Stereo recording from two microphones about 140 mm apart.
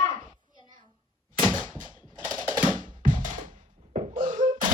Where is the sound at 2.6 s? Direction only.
35° right (ahead or behind).